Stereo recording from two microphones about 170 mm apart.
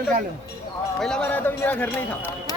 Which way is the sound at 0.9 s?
5° left (ahead or behind).